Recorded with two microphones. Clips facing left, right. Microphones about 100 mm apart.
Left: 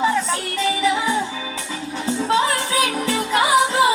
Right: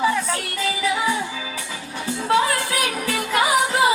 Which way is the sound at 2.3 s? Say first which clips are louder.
Right 1 dB; 25° left (ahead or behind).